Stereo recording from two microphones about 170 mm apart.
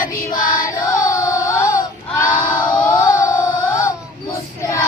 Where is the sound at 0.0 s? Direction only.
50° left (ahead or behind).